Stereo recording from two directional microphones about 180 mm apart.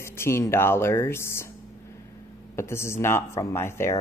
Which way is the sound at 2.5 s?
15° left (ahead or behind).